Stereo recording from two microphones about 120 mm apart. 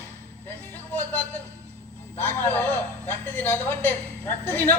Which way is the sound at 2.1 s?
15° left (ahead or behind).